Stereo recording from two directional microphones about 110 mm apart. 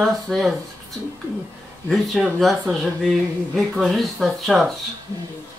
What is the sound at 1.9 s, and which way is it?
Speech, 5° right (ahead or behind).